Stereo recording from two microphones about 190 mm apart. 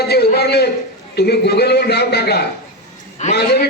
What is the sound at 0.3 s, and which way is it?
A man's voice, 60° left (ahead or behind).